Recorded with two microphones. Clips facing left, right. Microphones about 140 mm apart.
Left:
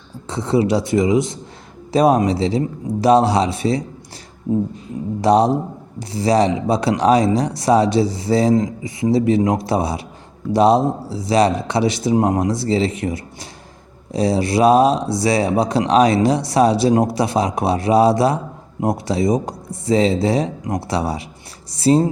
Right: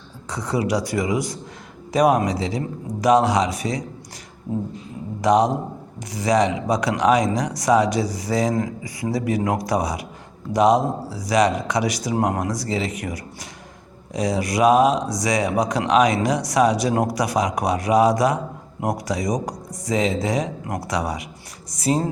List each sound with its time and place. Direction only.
0.3 s speech: 25° left (ahead or behind)
5.2 s a man's voice: 30° left (ahead or behind)